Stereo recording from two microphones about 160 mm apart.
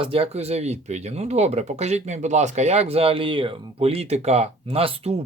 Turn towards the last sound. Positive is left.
turn(degrees=-40)  # may be behind; listen again after turning